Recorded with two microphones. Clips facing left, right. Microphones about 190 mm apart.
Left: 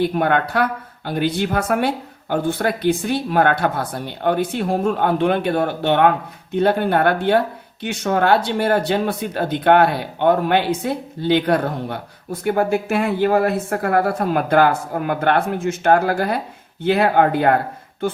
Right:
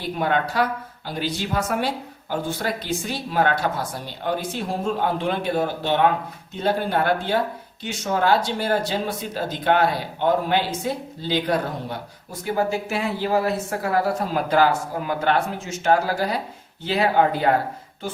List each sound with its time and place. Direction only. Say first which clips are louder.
0.0 s speech: left 5 dB; 60° left (ahead or behind)